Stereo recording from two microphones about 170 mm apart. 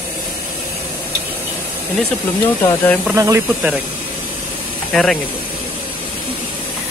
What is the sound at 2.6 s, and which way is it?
Speech, 15° left (ahead or behind).